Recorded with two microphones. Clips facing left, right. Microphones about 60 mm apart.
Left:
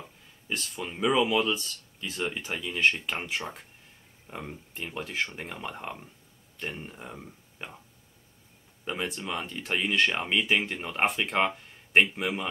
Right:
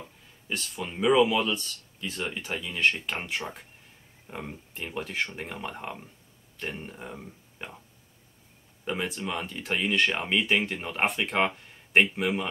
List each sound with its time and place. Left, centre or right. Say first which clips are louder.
0.5 s speech: even; centre
8.8 s speech: right 2 dB; centre